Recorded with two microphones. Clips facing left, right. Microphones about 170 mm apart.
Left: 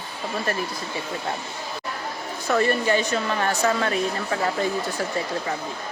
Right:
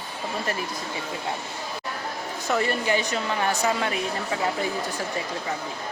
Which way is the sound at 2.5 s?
15° right (ahead or behind).